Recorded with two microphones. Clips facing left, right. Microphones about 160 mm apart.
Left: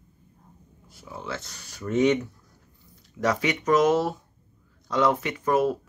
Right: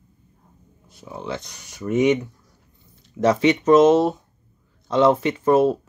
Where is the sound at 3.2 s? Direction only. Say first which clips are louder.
Right 7 dB; 25° right (ahead or behind).